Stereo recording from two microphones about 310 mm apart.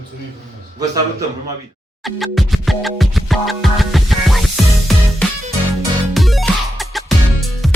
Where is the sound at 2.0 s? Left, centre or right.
Centre.